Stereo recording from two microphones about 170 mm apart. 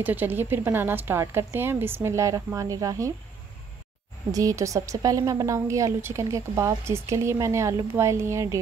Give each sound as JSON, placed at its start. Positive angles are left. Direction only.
{"t": 0.0, "sound": "a woman's voice", "side_deg": -10}
{"t": 4.3, "sound": "a woman's voice", "side_deg": -20}